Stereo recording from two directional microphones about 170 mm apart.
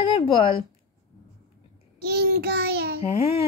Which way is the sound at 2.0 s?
70° right (ahead or behind).